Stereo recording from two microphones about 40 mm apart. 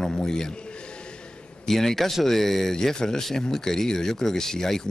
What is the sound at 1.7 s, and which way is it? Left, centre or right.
Speech, centre.